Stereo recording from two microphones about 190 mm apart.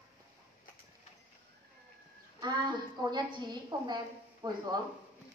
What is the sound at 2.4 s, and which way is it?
A woman's voice, 20° right (ahead or behind).